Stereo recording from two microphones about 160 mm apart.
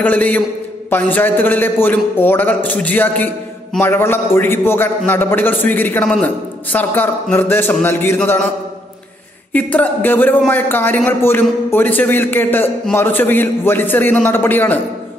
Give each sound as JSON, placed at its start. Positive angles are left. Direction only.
{"t": 0.0, "sound": "a man's voice", "side_deg": 10}
{"t": 9.5, "sound": "a man's voice", "side_deg": 10}